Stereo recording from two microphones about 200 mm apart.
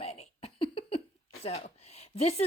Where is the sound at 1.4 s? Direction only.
30° left (ahead or behind).